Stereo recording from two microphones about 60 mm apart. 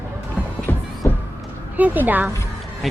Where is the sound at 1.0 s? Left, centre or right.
Left.